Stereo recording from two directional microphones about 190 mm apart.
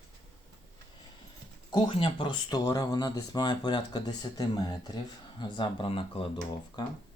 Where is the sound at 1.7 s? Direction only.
25° left (ahead or behind).